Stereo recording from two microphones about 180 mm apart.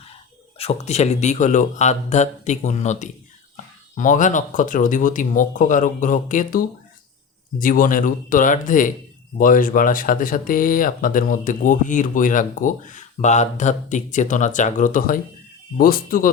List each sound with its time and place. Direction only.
0.6 s speech: 35° left (ahead or behind)